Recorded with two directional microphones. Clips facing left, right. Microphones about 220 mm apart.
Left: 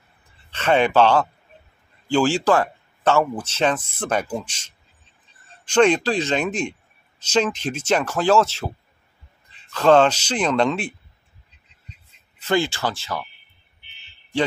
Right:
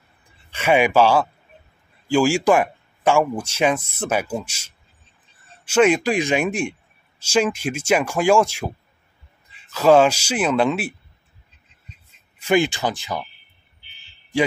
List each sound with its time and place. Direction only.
0.5 s speech: 10° right (ahead or behind)
12.4 s speech: 15° right (ahead or behind)